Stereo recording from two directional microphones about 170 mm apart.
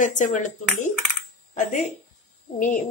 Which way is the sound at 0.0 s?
50° left (ahead or behind).